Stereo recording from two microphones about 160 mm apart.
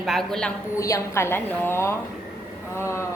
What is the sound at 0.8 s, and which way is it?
A woman's voice, 20° left (ahead or behind).